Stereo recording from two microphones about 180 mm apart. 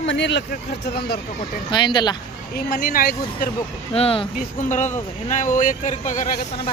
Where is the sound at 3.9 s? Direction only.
30° left (ahead or behind).